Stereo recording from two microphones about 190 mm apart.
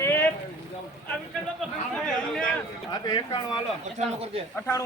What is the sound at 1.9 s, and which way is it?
Speech, centre (ahead or behind).